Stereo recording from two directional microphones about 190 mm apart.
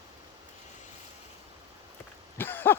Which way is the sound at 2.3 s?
10° left (ahead or behind).